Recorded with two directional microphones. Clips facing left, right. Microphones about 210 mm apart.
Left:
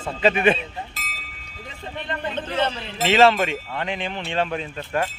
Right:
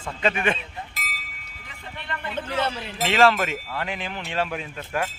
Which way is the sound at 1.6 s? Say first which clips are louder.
Left 5 dB; 25° left (ahead or behind).